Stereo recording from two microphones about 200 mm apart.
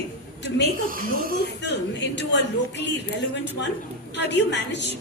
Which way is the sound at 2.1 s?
60° left (ahead or behind).